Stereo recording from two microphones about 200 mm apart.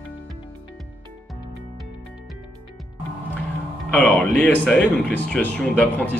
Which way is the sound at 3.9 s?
5° left (ahead or behind).